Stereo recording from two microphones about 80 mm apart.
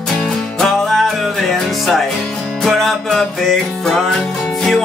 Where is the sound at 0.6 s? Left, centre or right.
Centre.